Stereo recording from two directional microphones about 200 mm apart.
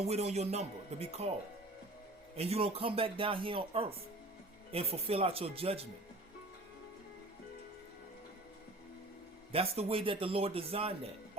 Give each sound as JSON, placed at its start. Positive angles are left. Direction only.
{"t": 0.0, "sound": "speech", "side_deg": -30}
{"t": 2.3, "sound": "speech", "side_deg": -30}
{"t": 9.5, "sound": "speech", "side_deg": -30}